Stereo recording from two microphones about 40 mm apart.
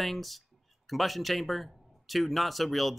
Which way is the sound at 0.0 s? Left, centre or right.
Centre.